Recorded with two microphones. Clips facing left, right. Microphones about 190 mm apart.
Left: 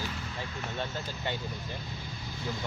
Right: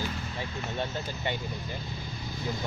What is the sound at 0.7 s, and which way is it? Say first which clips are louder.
Speech: right 3 dB; 15° right (ahead or behind).